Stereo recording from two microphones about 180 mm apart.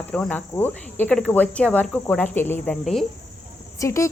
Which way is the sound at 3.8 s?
15° left (ahead or behind).